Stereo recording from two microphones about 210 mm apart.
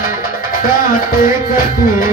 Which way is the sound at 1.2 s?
40° left (ahead or behind).